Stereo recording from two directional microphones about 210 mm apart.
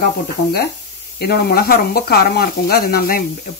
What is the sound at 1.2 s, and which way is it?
Speech, 45° left (ahead or behind).